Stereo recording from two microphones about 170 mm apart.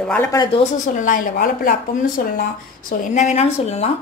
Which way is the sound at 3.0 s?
45° left (ahead or behind).